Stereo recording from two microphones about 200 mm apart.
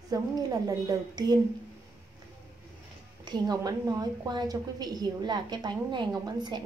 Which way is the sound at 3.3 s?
20° right (ahead or behind).